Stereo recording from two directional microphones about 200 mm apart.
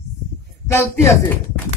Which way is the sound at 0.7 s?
10° left (ahead or behind).